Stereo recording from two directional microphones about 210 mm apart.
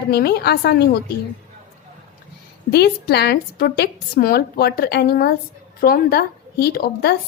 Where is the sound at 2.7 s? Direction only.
50° left (ahead or behind).